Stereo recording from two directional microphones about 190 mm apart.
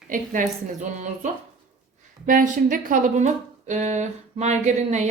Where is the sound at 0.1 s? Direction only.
40° right (ahead or behind).